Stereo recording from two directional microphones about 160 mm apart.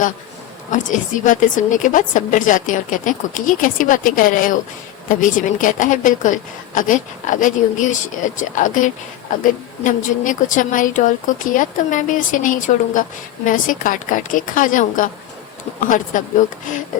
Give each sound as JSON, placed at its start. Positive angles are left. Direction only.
{"t": 0.7, "sound": "a woman's voice", "side_deg": 50}